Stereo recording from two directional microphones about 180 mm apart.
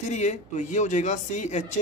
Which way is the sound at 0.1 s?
40° left (ahead or behind).